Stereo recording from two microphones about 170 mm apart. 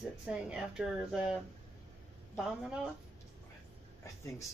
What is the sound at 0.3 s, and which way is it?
Speech, 5° right (ahead or behind).